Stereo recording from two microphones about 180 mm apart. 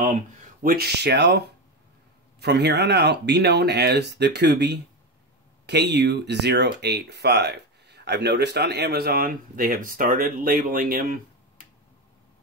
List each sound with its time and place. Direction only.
0.6 s speech: 55° right (ahead or behind)
2.4 s speech: 65° right (ahead or behind); by 11.1 s 50° right (ahead or behind)